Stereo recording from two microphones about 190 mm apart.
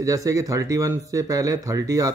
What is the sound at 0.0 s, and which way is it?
Speech, 15° right (ahead or behind).